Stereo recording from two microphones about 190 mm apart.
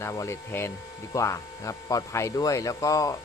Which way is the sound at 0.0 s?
15° left (ahead or behind).